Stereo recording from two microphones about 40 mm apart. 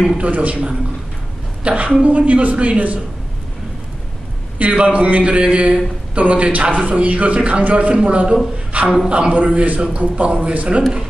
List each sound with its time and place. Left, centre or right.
0.2 s a man's voice: right
2.0 s a man's voice: right
4.6 s a man's voice: right
8.8 s a man's voice: centre
9.3 s a man's voice: right